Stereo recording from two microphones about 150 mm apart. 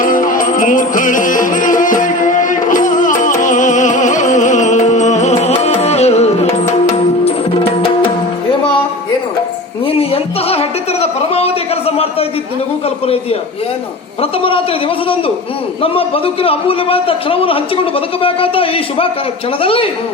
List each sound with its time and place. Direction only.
0.0 s music: 60° left (ahead or behind); by 7.9 s 40° left (ahead or behind)
9.8 s music: 40° left (ahead or behind)
14.2 s a man's voice: 40° left (ahead or behind)